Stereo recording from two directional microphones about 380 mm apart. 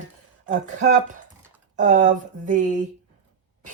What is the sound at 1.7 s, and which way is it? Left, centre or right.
Speech, centre.